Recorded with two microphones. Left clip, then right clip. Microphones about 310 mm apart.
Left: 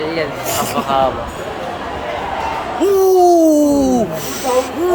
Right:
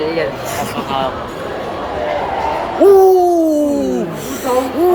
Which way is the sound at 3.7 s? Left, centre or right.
Left.